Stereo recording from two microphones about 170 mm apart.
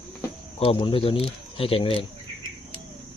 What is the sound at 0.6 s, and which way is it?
Speech, 30° left (ahead or behind).